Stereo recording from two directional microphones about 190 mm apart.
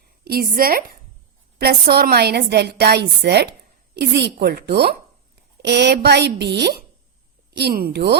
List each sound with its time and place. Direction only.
0.3 s a woman's voice: 50° right (ahead or behind)